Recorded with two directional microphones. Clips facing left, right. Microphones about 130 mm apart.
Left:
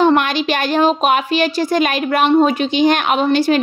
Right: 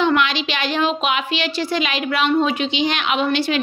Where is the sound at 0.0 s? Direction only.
45° left (ahead or behind).